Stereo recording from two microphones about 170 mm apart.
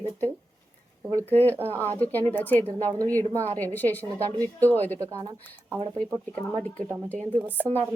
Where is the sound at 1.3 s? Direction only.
10° left (ahead or behind).